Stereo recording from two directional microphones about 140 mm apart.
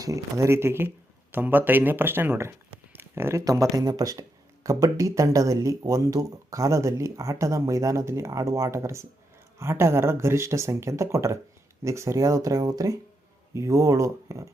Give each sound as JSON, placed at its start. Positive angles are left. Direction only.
{"t": 0.0, "sound": "speech", "side_deg": -25}